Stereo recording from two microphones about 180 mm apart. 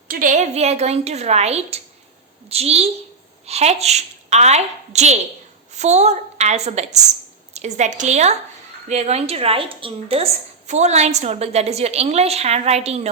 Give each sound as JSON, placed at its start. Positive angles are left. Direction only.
{"t": 0.1, "sound": "a woman's voice", "side_deg": -45}